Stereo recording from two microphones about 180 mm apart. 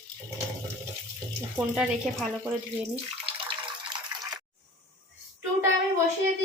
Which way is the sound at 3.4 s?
25° right (ahead or behind).